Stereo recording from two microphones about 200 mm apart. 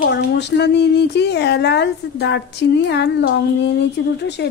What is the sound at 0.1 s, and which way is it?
A woman's voice, 60° left (ahead or behind).